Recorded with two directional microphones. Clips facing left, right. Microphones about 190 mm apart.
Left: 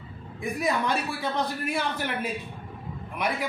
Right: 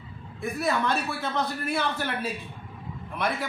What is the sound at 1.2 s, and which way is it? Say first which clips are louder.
Speech: left 1 dB; 15° left (ahead or behind).